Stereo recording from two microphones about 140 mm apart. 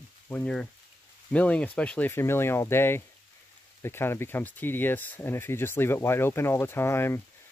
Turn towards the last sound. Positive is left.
turn(degrees=20)  # may be behind; listen again after turning